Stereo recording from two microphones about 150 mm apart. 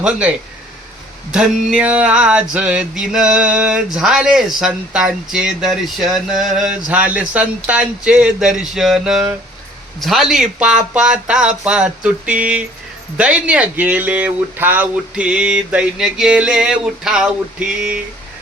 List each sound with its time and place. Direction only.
0.0 s speech: 10° right (ahead or behind)
1.3 s a sound: 5° right (ahead or behind)
13.1 s speech: 10° right (ahead or behind)